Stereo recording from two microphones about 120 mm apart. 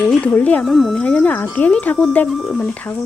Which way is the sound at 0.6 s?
Centre (ahead or behind).